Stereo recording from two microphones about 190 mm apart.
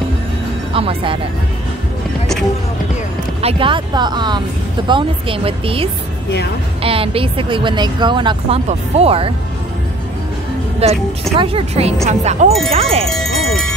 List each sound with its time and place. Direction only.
0.7 s speech: 30° right (ahead or behind)
3.3 s speech: 30° right (ahead or behind)
10.8 s speech: 35° right (ahead or behind)
13.1 s speech: centre (ahead or behind)